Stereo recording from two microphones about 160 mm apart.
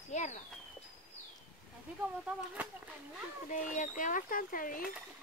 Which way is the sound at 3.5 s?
50° left (ahead or behind).